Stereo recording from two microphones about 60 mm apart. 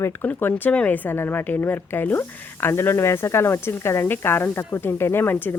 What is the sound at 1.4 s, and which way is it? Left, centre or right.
Speech, left.